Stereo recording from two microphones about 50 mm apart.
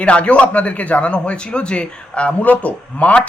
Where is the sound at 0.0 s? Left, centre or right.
Left.